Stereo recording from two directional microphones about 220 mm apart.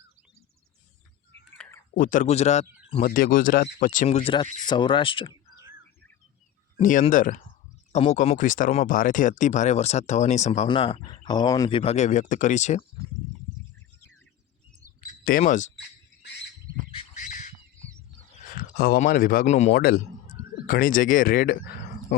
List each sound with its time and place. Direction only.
1.5 s a sound: 5° left (ahead or behind)
2.0 s speech: 35° left (ahead or behind)
6.7 s speech: 30° left (ahead or behind)
15.0 s speech: 40° left (ahead or behind)
17.2 s bird: 35° left (ahead or behind)
18.2 s speech: 35° left (ahead or behind)